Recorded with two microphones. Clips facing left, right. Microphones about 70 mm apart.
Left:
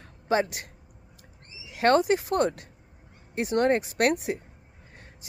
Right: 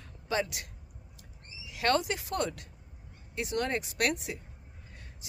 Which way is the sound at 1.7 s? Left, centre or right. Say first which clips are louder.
Left 8 dB; left.